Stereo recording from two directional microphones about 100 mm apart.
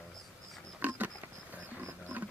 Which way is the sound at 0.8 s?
15° right (ahead or behind).